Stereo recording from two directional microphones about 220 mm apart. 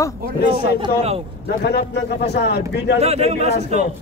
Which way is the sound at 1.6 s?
50° left (ahead or behind).